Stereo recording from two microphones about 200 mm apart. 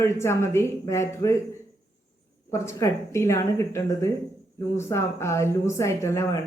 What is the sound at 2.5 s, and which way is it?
Speech, 15° left (ahead or behind).